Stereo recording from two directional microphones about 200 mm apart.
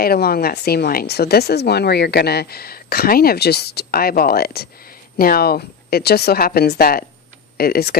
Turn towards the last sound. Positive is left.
turn(degrees=50)  # may be behind; listen again after turning